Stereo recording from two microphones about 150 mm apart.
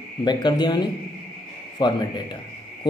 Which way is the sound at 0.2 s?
30° left (ahead or behind).